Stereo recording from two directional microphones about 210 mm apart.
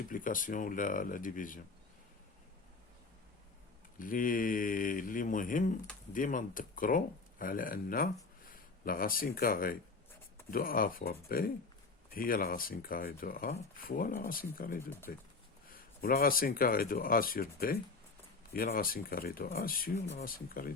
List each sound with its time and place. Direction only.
0.1 s speech: 40° left (ahead or behind)
3.9 s speech: 40° left (ahead or behind)